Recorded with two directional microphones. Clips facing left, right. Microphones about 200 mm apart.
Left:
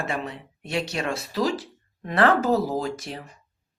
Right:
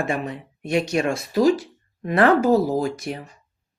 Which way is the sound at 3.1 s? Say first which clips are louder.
Right 6 dB; 55° right (ahead or behind).